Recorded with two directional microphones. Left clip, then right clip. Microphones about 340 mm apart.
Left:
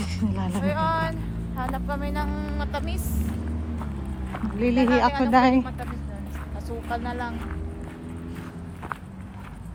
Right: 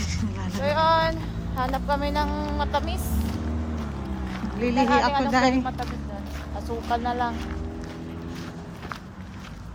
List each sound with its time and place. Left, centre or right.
0.3 s a sound: centre
0.6 s a woman's voice: right
4.6 s speech: centre
6.7 s a woman's voice: centre